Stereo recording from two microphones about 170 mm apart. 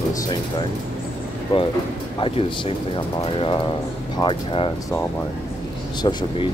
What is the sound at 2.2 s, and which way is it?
Speech, 30° left (ahead or behind).